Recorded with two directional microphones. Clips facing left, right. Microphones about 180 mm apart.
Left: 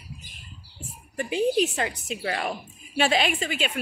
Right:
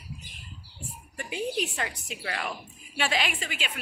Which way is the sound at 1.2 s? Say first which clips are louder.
Left 8 dB; 25° left (ahead or behind).